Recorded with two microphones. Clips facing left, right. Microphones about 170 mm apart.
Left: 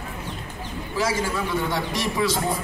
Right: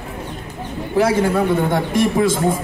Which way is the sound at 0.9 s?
60° right (ahead or behind).